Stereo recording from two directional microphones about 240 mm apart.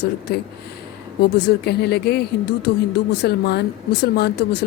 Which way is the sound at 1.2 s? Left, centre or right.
Left.